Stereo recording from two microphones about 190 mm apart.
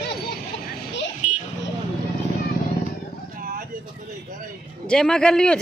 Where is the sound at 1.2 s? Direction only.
40° left (ahead or behind).